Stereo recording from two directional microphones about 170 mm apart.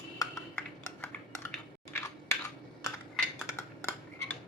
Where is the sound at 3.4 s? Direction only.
15° left (ahead or behind).